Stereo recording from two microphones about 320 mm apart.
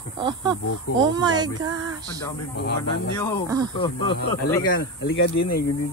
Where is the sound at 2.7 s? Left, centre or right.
Left.